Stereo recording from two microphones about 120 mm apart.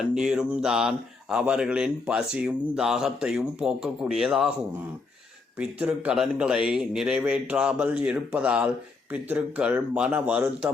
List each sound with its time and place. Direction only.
0.0 s speech: 5° right (ahead or behind)
5.5 s a man's voice: 10° right (ahead or behind)